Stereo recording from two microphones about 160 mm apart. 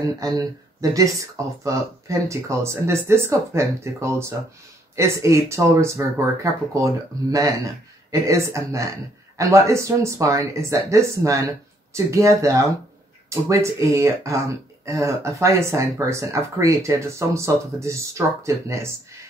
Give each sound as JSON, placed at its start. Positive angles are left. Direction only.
{"t": 0.2, "sound": "speech", "side_deg": -20}